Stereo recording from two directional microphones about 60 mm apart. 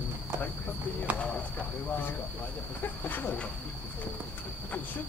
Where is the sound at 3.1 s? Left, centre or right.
Left.